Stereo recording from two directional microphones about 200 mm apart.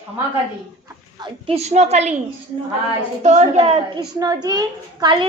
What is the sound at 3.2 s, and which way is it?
Speech, 35° right (ahead or behind).